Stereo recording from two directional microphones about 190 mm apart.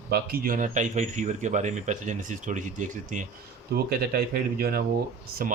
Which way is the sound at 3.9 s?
55° right (ahead or behind).